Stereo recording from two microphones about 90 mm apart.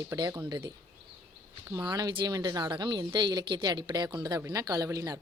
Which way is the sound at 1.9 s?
50° right (ahead or behind).